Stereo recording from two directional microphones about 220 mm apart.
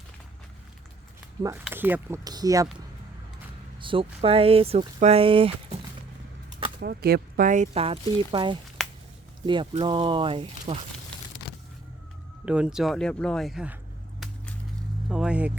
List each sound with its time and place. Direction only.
1.6 s speech: 10° right (ahead or behind)
3.8 s speech: 25° right (ahead or behind)
6.7 s speech: 45° right (ahead or behind); by 10.8 s 25° right (ahead or behind)
12.5 s speech: 5° right (ahead or behind)
14.2 s a sound: centre (ahead or behind)
15.1 s speech: 5° right (ahead or behind)